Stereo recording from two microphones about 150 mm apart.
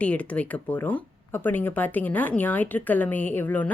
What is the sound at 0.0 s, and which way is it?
Speech, 10° left (ahead or behind).